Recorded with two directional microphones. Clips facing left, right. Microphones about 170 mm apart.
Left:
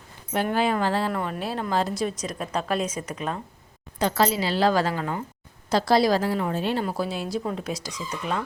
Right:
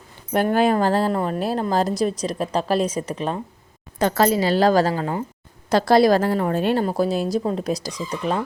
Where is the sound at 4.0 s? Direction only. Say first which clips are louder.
Right 5 dB; 50° right (ahead or behind); by 5.2 s 30° right (ahead or behind).